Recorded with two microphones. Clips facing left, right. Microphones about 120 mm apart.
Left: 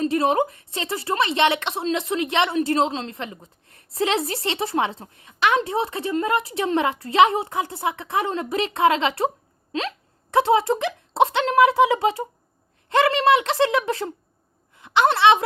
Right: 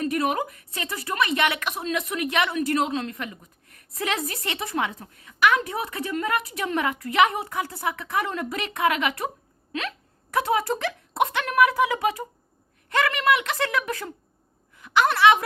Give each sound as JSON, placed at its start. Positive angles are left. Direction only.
{"t": 0.0, "sound": "a woman's voice", "side_deg": 30}